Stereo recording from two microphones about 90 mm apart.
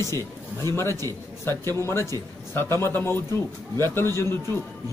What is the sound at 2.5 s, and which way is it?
A man's voice, 30° left (ahead or behind).